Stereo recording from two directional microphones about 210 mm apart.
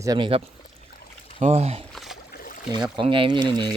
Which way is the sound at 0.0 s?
20° right (ahead or behind).